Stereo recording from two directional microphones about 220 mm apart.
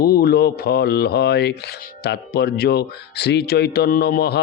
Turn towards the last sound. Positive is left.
turn(degrees=45)  # may be behind; listen again after turning